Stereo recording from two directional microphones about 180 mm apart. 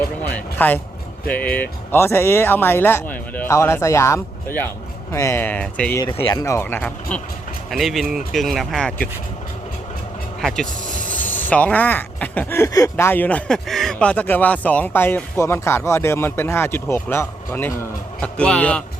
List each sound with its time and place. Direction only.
0.2 s a man's voice: 10° left (ahead or behind)
11.1 s speech: 10° left (ahead or behind)